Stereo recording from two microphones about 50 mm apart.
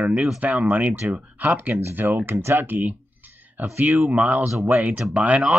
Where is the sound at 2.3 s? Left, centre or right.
Right.